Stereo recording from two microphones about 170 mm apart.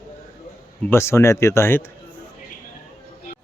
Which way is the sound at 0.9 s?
15° left (ahead or behind).